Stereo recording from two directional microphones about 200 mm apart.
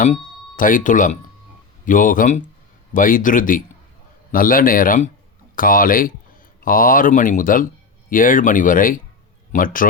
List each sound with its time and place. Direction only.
0.0 s speech: 40° left (ahead or behind)